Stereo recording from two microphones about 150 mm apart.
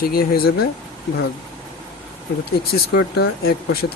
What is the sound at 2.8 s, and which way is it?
Speech, 90° left.